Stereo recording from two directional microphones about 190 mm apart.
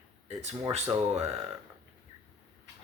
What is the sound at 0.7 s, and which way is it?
Speech, 35° right (ahead or behind).